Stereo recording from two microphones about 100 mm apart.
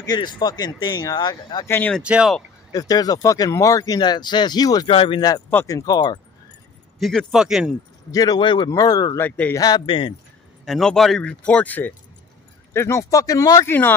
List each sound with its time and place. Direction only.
0.0 s speech: 45° left (ahead or behind)
2.0 s speech: 10° right (ahead or behind)
2.7 s speech: 40° left (ahead or behind)
4.8 s speech: 60° left (ahead or behind)
5.7 s speech: 35° left (ahead or behind)
7.0 s speech: centre (ahead or behind)
8.1 s speech: 40° left (ahead or behind)
8.6 s speech: 40° left (ahead or behind)
9.2 s a man's voice: 20° left (ahead or behind)
9.6 s speech: 40° left (ahead or behind)
9.8 s speech: 60° left (ahead or behind)
10.6 s speech: centre (ahead or behind)
12.7 s speech: 30° left (ahead or behind)